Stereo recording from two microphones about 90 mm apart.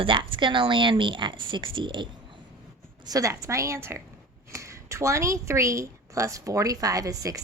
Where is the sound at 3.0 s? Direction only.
40° right (ahead or behind).